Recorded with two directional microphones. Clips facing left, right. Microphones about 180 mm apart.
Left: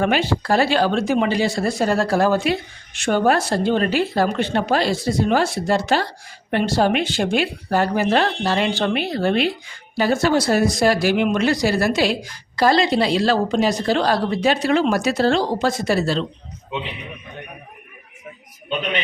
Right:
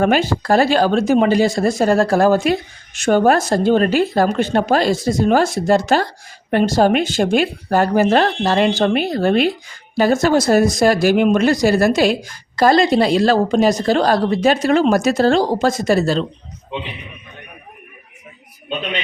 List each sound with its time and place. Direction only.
0.0 s speech: 45° right (ahead or behind)